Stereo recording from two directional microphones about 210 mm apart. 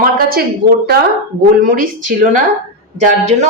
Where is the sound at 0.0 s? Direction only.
45° right (ahead or behind).